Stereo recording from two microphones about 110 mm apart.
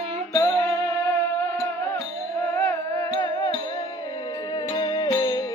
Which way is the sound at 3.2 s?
40° left (ahead or behind).